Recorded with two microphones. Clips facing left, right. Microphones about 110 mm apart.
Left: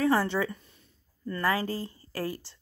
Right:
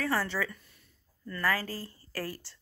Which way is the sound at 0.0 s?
25° left (ahead or behind).